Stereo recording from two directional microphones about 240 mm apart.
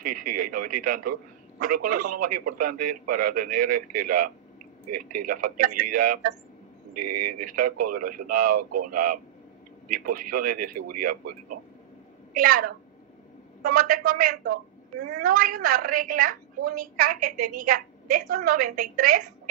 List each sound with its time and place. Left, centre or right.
0.0 s a man's voice: right
7.3 s a man's voice: right
10.0 s a man's voice: right
12.4 s a man's voice: right